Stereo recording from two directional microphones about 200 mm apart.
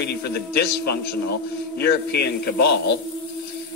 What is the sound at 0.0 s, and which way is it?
Speech, 55° left (ahead or behind).